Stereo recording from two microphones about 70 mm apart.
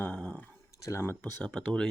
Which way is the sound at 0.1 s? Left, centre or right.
Centre.